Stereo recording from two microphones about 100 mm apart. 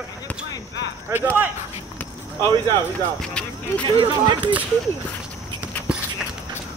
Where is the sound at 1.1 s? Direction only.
20° right (ahead or behind).